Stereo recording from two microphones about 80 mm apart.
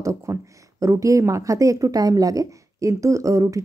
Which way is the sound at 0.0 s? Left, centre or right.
Right.